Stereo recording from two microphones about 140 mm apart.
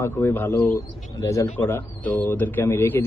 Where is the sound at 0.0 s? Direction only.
15° left (ahead or behind).